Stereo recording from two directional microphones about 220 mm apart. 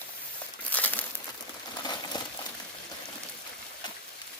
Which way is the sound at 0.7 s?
5° left (ahead or behind).